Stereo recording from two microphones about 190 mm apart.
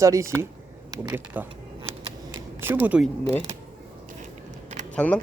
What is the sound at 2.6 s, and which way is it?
Speech, 10° right (ahead or behind).